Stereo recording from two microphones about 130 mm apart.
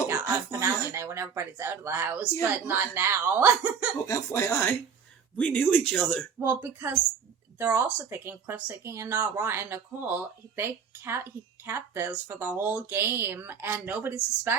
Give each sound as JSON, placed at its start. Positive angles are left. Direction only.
{"t": 0.6, "sound": "speech", "side_deg": -20}
{"t": 4.0, "sound": "speech", "side_deg": 20}
{"t": 6.4, "sound": "speech", "side_deg": -15}